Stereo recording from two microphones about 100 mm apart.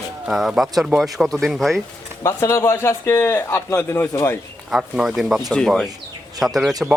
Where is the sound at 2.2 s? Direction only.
30° left (ahead or behind).